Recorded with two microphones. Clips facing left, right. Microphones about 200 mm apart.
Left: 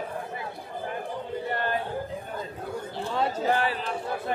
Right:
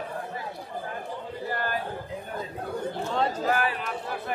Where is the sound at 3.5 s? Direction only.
30° left (ahead or behind).